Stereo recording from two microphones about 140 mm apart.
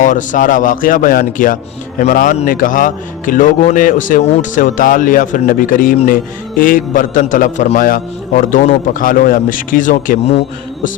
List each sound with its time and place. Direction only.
0.0 s a man's voice: 65° left (ahead or behind); by 1.5 s 85° left
2.0 s a man's voice: 70° left (ahead or behind)